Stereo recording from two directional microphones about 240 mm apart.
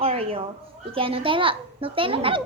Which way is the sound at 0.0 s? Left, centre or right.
Right.